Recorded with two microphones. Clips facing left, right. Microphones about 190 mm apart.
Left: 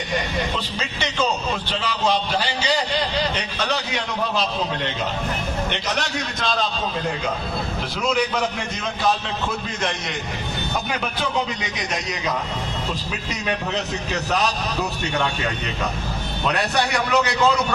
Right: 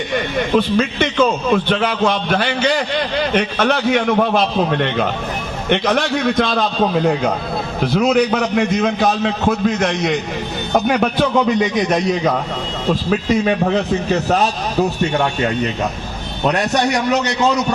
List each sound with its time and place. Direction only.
0.5 s a man's voice: 60° right (ahead or behind)
14.1 s a man's voice: 40° right (ahead or behind)